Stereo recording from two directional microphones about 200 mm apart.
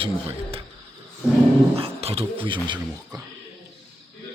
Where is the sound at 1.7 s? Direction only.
30° right (ahead or behind).